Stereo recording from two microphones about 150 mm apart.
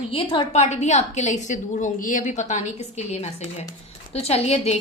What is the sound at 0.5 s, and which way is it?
A woman's voice, 50° left (ahead or behind).